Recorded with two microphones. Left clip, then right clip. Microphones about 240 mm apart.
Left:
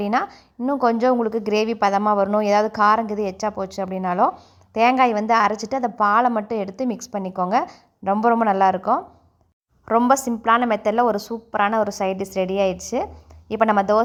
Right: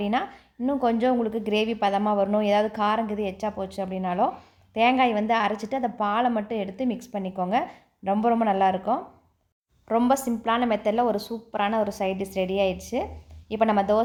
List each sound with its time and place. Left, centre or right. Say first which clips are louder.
0.0 s a woman's voice: left 5 dB; left